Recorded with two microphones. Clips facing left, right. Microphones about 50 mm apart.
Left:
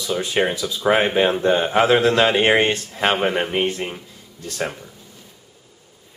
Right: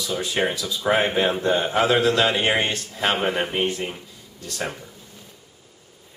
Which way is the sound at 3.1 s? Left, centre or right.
Centre.